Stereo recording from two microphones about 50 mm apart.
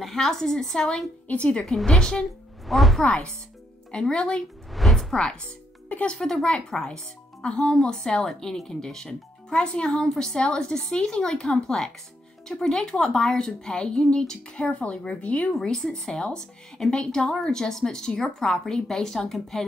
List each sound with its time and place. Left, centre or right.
0.0 s speech: centre
1.2 s a woman's voice: left
1.9 s speech: centre
2.6 s speech: centre
3.9 s speech: centre
4.7 s music: centre
5.1 s speech: centre
15.6 s speech: centre